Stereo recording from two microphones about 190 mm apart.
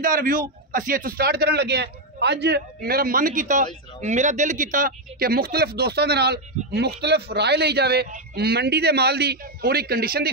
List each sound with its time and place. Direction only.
0.0 s a man's voice: 45° right (ahead or behind)